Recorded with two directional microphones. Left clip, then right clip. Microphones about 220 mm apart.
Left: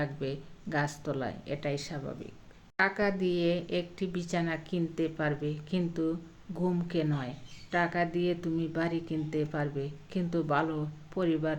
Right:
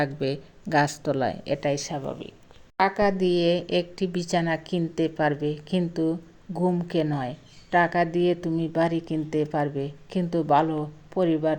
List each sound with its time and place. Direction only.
0.0 s a woman's voice: 35° right (ahead or behind)